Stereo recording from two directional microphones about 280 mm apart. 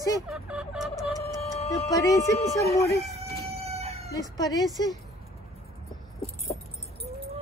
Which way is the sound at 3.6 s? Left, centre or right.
Right.